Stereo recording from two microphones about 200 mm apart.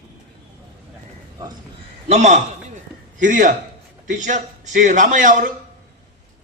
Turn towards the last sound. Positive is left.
turn(degrees=-40)  # may be behind; listen again after turning